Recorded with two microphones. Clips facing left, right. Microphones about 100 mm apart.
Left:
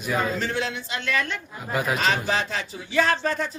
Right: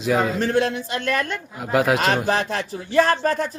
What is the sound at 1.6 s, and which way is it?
Speech, 85° right.